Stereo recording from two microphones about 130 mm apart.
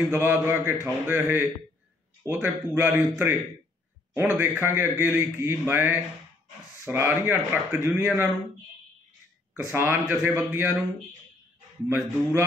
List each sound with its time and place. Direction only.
0.1 s a man's voice: 15° right (ahead or behind)
9.7 s a man's voice: 15° right (ahead or behind)
11.9 s a man's voice: 15° right (ahead or behind)